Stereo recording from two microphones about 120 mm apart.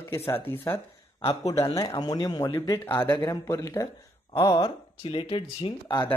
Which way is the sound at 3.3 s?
30° left (ahead or behind).